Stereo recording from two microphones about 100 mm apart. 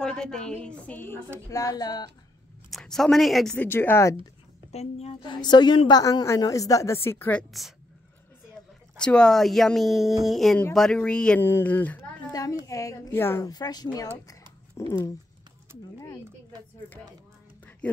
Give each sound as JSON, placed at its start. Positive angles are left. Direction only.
{"t": 0.0, "sound": "a woman's voice", "side_deg": 5}
{"t": 1.5, "sound": "speech", "side_deg": 35}
{"t": 2.7, "sound": "speech", "side_deg": 5}
{"t": 3.5, "sound": "a woman's voice", "side_deg": 20}
{"t": 4.7, "sound": "a woman's voice", "side_deg": 90}
{"t": 5.2, "sound": "a woman's voice", "side_deg": 50}
{"t": 7.5, "sound": "speech", "side_deg": 0}
{"t": 8.9, "sound": "a woman's voice", "side_deg": 10}
{"t": 11.4, "sound": "a woman's voice", "side_deg": 20}
{"t": 12.3, "sound": "a woman's voice", "side_deg": 35}
{"t": 13.5, "sound": "a woman's voice", "side_deg": 40}
{"t": 14.9, "sound": "a woman's voice", "side_deg": 30}